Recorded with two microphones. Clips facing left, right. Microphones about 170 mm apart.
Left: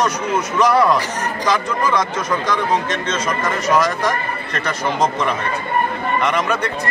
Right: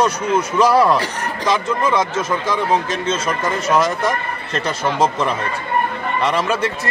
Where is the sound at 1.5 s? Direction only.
25° right (ahead or behind).